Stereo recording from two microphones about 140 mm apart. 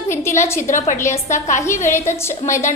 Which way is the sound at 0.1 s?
20° left (ahead or behind).